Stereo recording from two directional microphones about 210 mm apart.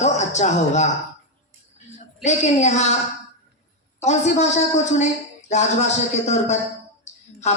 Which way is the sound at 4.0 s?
35° left (ahead or behind).